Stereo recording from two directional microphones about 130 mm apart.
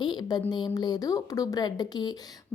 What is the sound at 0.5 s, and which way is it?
A woman's voice, 35° left (ahead or behind).